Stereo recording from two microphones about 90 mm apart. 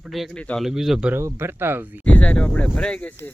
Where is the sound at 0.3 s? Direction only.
10° left (ahead or behind).